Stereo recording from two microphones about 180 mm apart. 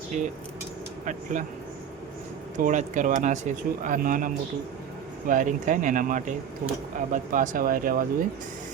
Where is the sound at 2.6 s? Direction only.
45° right (ahead or behind).